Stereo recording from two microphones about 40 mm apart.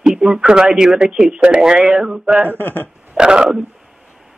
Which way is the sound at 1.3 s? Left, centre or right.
Right.